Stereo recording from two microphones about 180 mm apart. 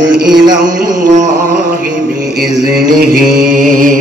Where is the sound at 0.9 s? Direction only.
45° right (ahead or behind).